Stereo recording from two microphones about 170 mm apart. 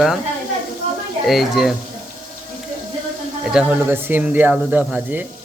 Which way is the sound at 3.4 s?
5° right (ahead or behind).